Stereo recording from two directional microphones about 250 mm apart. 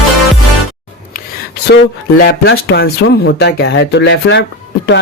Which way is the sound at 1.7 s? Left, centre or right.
Left.